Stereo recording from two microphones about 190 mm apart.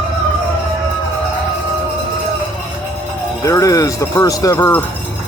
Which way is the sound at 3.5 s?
15° left (ahead or behind).